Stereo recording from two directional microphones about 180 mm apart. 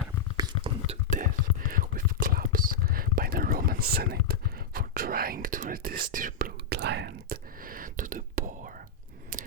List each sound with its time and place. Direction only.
0.3 s whispering: 20° right (ahead or behind)
0.9 s whispering: 45° right (ahead or behind)
9.3 s scissors: 45° right (ahead or behind)